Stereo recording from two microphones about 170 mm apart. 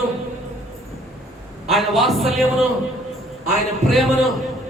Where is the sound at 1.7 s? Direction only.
Centre (ahead or behind).